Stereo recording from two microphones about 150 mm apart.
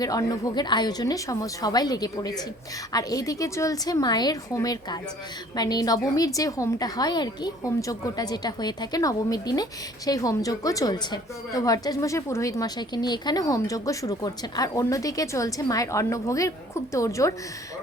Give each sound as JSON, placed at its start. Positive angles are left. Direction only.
{"t": 0.0, "sound": "a woman's voice", "side_deg": 25}